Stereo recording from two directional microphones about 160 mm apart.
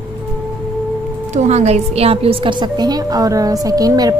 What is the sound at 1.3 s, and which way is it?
A woman's voice, 45° right (ahead or behind).